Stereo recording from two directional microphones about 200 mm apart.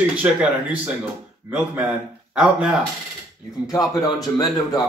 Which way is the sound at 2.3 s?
5° right (ahead or behind).